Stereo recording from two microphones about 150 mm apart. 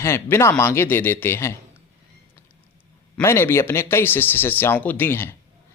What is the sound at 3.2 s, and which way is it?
A man's voice, 15° left (ahead or behind).